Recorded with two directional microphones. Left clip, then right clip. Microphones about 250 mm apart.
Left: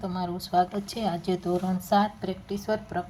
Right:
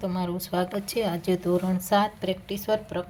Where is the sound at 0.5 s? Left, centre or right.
Right.